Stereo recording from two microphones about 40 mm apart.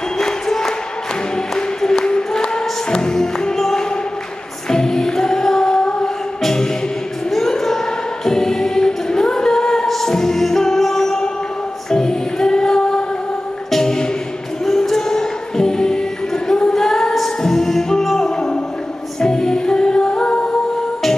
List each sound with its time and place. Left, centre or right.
0.2 s music: centre
1.8 s music: centre
8.3 s singing: centre
9.8 s music: centre
16.4 s singing: left
16.7 s music: centre